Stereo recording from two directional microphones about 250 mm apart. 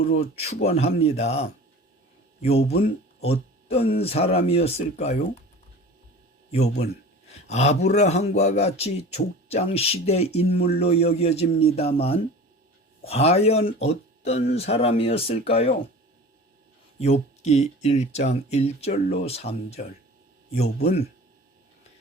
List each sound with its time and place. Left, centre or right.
0.1 s speech: left
7.3 s speech: left
17.0 s speech: left
20.8 s speech: left